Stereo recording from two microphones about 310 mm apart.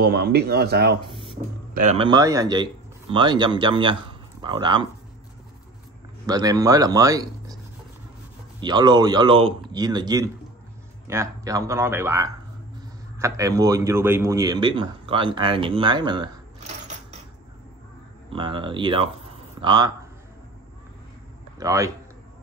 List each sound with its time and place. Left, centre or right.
0.0 s speech: right
1.1 s a sound: centre
1.7 s speech: right
6.2 s speech: centre
8.5 s a man's voice: centre
18.3 s speech: centre
21.5 s speech: centre